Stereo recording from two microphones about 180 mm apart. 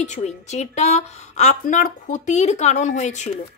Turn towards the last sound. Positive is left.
turn(degrees=40)  # may be behind; listen again after turning